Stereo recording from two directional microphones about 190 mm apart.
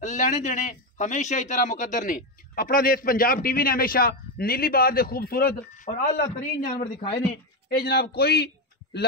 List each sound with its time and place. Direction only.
0.0 s a man's voice: 40° left (ahead or behind); by 8.5 s 55° left (ahead or behind)